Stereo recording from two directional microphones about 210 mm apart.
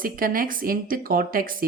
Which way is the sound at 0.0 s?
40° right (ahead or behind).